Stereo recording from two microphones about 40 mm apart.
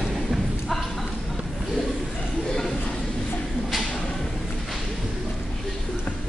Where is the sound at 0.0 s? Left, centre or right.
Centre.